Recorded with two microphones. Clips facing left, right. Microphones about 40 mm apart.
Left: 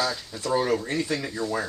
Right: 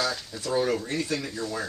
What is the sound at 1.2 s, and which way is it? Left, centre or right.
Speech, centre.